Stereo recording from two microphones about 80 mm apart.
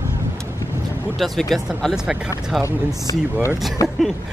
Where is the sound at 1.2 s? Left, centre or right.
Centre.